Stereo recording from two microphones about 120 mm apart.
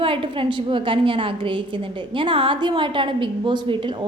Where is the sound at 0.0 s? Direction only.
50° right (ahead or behind).